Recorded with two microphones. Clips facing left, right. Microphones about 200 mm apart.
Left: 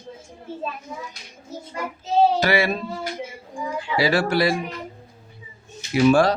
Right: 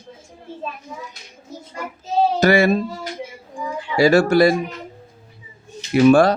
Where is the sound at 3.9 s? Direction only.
45° right (ahead or behind).